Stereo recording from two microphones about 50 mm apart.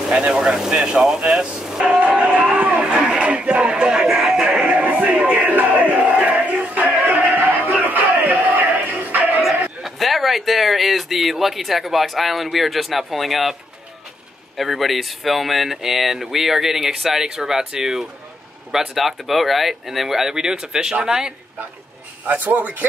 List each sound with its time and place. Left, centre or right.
0.3 s speech: centre
1.9 s music: right
2.5 s a sound: right
2.8 s a sound: right
4.6 s music: right
5.1 s crowd: right
7.3 s battle cry: right
9.8 s speech: centre
14.6 s speech: centre
22.2 s speech: right